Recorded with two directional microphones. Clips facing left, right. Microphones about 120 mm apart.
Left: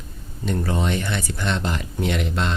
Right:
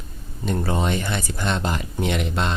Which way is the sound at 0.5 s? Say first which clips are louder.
Right 1 dB; 20° right (ahead or behind).